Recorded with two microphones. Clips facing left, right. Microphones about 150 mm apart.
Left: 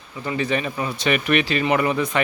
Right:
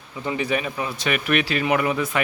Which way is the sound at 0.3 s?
15° right (ahead or behind).